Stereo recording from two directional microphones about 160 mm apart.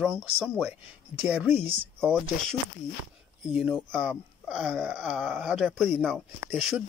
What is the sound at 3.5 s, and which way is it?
Speech, 5° right (ahead or behind).